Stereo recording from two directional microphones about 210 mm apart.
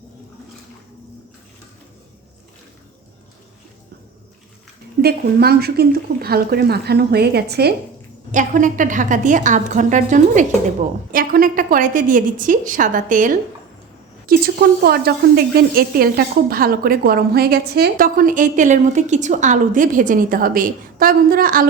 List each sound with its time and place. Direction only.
5.0 s a woman's voice: 50° right (ahead or behind)
8.3 s a woman's voice: 35° right (ahead or behind)